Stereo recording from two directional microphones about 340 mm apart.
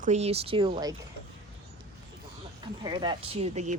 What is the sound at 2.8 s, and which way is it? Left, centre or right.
Speech, centre.